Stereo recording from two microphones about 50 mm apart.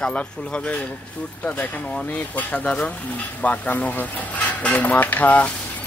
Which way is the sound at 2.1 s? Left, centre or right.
Left.